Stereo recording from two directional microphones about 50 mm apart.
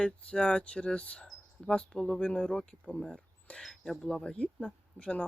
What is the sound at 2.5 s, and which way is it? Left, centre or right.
Speech, centre.